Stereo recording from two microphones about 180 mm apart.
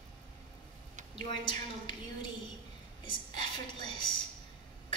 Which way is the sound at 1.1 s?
25° left (ahead or behind).